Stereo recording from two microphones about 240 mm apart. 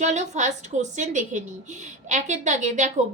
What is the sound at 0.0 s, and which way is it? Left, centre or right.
A woman's voice, right.